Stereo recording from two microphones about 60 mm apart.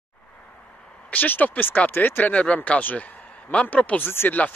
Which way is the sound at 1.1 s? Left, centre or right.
Left.